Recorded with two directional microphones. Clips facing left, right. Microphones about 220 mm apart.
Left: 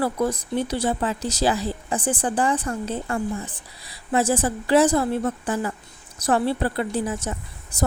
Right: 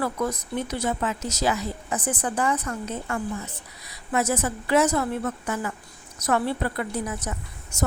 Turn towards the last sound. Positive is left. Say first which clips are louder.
# left 3 dB
turn(degrees=30)  # may be behind; listen again after turning